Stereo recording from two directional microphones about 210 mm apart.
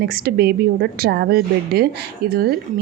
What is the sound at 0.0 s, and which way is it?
Speech, 45° right (ahead or behind).